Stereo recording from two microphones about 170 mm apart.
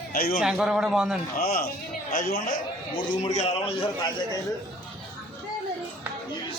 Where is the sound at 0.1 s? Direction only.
60° left (ahead or behind).